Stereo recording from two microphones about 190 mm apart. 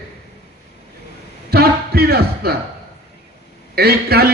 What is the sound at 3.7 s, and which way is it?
Speech, 55° right (ahead or behind).